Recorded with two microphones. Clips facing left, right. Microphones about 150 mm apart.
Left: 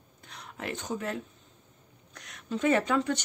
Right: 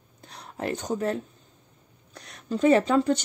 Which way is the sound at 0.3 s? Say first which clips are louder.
Right 6 dB; 35° right (ahead or behind).